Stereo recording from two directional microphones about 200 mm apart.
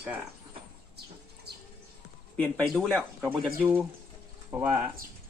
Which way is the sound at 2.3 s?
5° left (ahead or behind).